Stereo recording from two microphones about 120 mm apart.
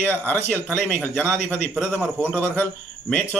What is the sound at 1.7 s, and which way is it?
Speech, 10° right (ahead or behind).